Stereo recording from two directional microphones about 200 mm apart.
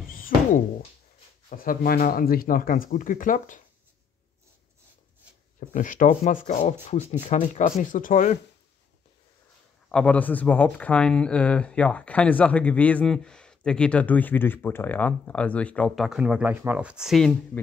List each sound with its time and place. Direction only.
1.5 s speech: 45° left (ahead or behind)
5.7 s speech: 40° left (ahead or behind)
9.8 s speech: 5° left (ahead or behind)